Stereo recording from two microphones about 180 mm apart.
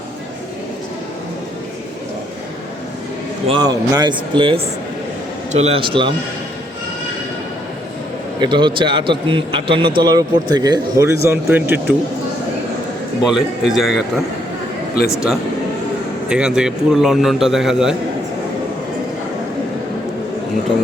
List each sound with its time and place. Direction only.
3.4 s a man's voice: 25° right (ahead or behind)
8.4 s a man's voice: 25° right (ahead or behind); by 11.9 s 10° right (ahead or behind)
13.2 s a man's voice: centre (ahead or behind)
16.3 s a man's voice: 5° right (ahead or behind)